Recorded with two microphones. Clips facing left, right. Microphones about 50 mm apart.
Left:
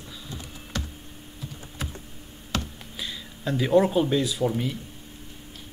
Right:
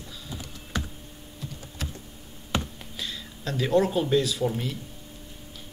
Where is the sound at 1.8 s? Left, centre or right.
Centre.